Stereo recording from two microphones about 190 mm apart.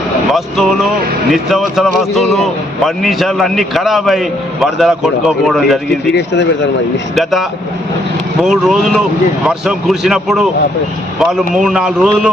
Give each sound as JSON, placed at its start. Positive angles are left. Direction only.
{"t": 0.3, "sound": "speech", "side_deg": 0}
{"t": 6.1, "sound": "speech", "side_deg": 65}
{"t": 7.2, "sound": "speech", "side_deg": 0}
{"t": 8.4, "sound": "speech", "side_deg": 0}